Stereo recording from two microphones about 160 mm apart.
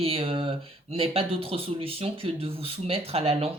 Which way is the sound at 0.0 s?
35° right (ahead or behind).